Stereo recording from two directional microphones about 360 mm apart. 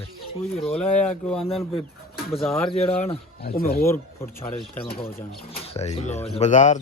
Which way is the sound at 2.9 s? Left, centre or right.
Centre.